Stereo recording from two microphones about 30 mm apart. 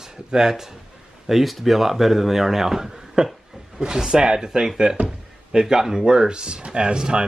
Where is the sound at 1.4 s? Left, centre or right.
Centre.